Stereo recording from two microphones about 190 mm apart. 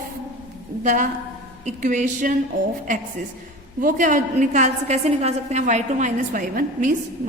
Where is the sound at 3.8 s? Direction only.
40° right (ahead or behind).